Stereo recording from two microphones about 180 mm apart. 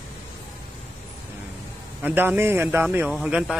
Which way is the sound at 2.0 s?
10° right (ahead or behind).